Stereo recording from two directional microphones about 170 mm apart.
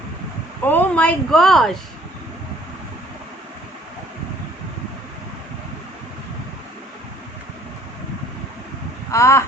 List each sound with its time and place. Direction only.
0.6 s speech: 10° left (ahead or behind)
9.1 s speech: 15° left (ahead or behind)